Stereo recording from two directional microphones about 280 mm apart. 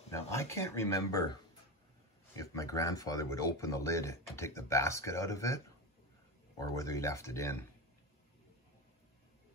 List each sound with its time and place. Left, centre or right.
0.1 s speech: centre
6.6 s speech: centre